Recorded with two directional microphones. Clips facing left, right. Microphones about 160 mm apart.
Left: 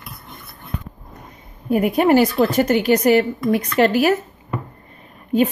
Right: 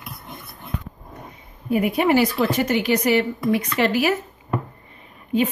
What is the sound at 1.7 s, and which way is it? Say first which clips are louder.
Speech: left 3 dB; 45° left (ahead or behind).